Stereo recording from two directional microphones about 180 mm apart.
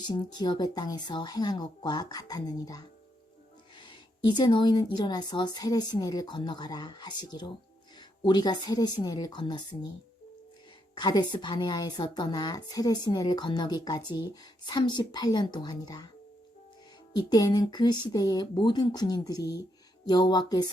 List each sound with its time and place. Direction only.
0.1 s a woman's voice: 25° left (ahead or behind)
10.9 s a woman's voice: 25° left (ahead or behind)
17.2 s a woman's voice: 25° left (ahead or behind)